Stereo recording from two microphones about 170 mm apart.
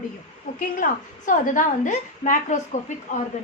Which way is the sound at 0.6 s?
50° left (ahead or behind).